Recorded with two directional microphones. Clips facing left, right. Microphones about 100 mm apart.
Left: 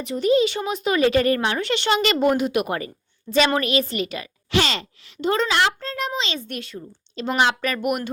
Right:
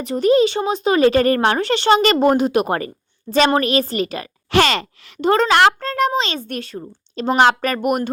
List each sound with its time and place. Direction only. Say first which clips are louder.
0.0 s speech: right 4 dB; 45° right (ahead or behind)
0.4 s a woman's voice: right 5 dB; 30° right (ahead or behind); by 1.6 s 50° right (ahead or behind)
1.6 s a woman's voice: right 7 dB; 35° right (ahead or behind)